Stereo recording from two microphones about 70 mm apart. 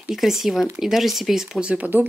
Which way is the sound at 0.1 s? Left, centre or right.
Centre.